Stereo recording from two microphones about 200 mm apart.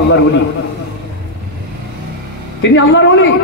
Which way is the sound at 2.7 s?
70° left (ahead or behind).